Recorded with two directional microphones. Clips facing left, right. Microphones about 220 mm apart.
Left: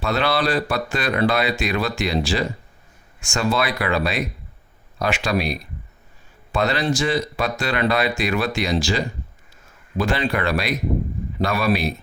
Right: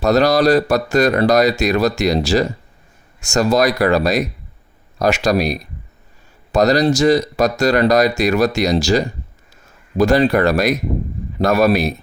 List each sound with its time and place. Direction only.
0.0 s speech: 40° right (ahead or behind)